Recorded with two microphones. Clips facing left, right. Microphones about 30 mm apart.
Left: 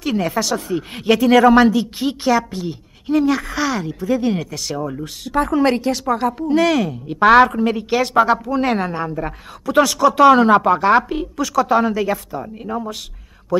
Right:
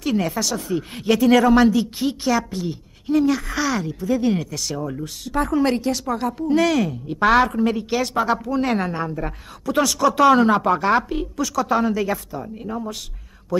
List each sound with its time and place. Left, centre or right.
0.0 s a woman's voice: centre
0.3 s a woman's voice: left; by 13.7 s centre